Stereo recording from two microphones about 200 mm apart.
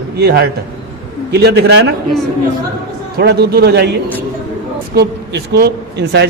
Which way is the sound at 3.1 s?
55° right (ahead or behind).